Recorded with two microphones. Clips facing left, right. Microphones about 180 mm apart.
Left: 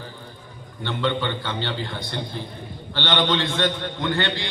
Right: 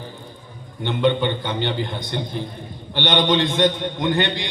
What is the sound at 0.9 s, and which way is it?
A man's voice, 15° right (ahead or behind).